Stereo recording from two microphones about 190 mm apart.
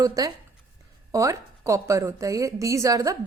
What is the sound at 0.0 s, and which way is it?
A woman's voice, 20° right (ahead or behind).